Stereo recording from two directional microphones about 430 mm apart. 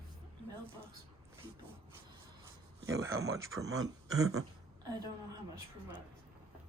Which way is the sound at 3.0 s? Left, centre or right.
Centre.